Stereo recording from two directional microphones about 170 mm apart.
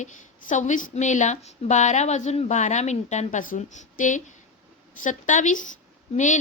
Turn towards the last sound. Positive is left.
turn(degrees=45)  # may be behind; listen again after turning